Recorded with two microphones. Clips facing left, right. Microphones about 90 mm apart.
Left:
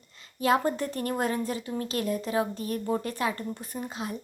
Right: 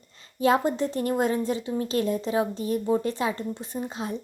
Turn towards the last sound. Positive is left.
turn(degrees=-30)  # may be behind; listen again after turning